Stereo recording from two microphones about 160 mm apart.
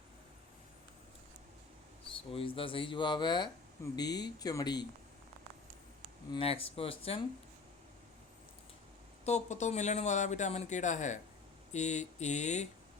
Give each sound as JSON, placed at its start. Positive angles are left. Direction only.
{"t": 2.0, "sound": "speech", "side_deg": 35}
{"t": 6.3, "sound": "speech", "side_deg": 35}
{"t": 9.2, "sound": "speech", "side_deg": 45}